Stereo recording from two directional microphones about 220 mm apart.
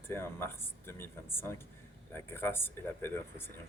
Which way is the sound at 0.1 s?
10° left (ahead or behind).